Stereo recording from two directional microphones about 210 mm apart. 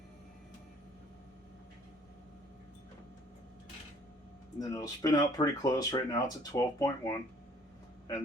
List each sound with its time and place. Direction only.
4.5 s speech: 15° left (ahead or behind)